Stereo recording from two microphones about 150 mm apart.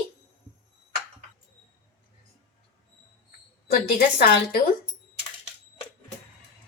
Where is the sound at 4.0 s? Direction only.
80° left.